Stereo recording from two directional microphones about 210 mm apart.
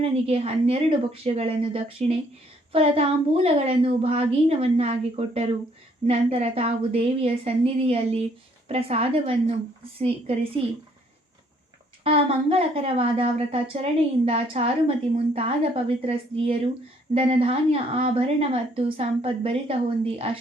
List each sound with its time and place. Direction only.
0.0 s a woman's voice: 30° right (ahead or behind)
12.0 s a woman's voice: 30° right (ahead or behind)